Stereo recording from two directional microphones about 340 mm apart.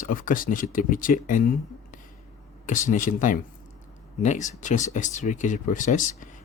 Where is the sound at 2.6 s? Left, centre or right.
Left.